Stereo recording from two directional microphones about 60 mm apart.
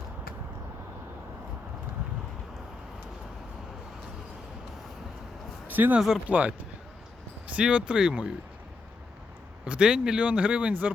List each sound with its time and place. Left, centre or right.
5.6 s speech: right; by 8.3 s centre
9.6 s speech: centre